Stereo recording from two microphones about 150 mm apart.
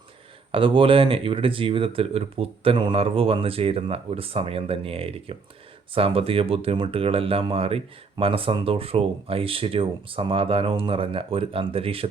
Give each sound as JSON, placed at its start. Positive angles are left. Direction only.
{"t": 0.5, "sound": "speech", "side_deg": -35}